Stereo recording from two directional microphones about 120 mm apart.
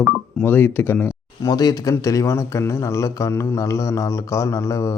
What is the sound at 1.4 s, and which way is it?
Speech, 35° left (ahead or behind).